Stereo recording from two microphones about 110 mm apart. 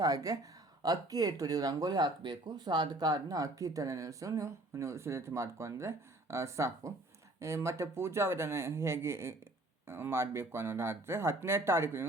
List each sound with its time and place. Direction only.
0.0 s speech: 30° right (ahead or behind)